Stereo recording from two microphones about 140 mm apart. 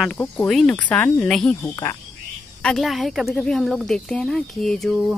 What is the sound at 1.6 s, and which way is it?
Speech, 20° left (ahead or behind).